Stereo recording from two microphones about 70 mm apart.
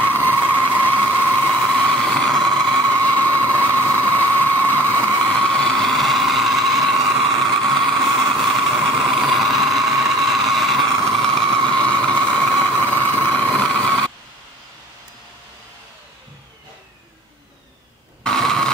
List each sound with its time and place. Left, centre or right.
0.0 s vehicle: left
1.5 s vehicle: centre
18.2 s a sound: centre